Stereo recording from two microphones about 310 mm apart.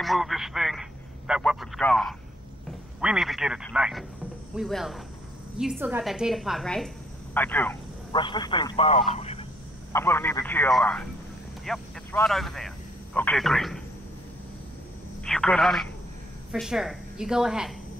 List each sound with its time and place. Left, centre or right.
0.0 s a sound: centre
4.6 s a woman's voice: centre
9.9 s a woman's voice: centre
15.2 s a woman's voice: centre